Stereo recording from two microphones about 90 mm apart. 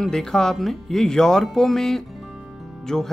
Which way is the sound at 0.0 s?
5° left (ahead or behind).